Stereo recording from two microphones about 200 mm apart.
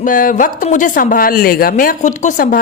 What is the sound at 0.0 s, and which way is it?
Speech, 45° left (ahead or behind).